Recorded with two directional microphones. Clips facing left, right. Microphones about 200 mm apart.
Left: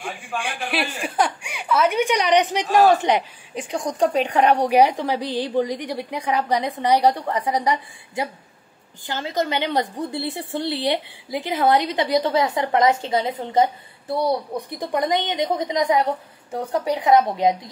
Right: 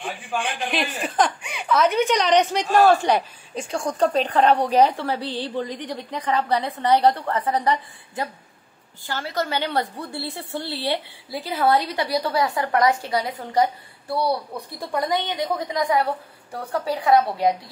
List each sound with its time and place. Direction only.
0.0 s a woman's voice: 10° left (ahead or behind)